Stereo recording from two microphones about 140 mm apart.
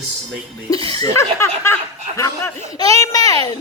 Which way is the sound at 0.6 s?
25° left (ahead or behind).